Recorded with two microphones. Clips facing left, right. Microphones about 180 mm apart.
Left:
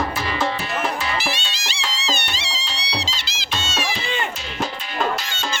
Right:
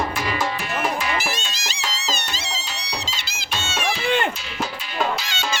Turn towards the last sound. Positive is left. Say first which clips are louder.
# right 3 dB
turn(degrees=-60)  # may be behind; listen again after turning